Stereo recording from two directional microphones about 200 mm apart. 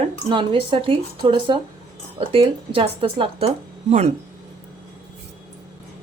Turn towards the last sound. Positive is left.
turn(degrees=-35)  # may be behind; listen again after turning